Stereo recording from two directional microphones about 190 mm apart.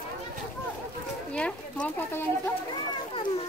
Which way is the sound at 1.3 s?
5° left (ahead or behind).